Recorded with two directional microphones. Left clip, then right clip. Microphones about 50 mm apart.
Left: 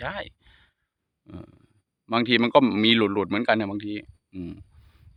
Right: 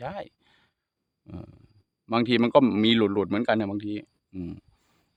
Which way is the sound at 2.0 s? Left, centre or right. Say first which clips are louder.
Left 2 dB; right.